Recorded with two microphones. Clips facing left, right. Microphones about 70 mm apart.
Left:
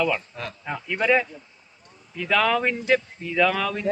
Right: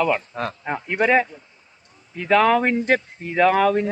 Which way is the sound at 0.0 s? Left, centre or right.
Right.